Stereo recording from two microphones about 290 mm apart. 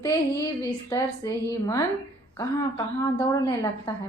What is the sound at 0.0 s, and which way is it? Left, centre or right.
A woman's voice, centre.